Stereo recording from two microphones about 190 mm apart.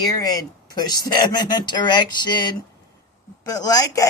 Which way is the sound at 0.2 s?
20° left (ahead or behind).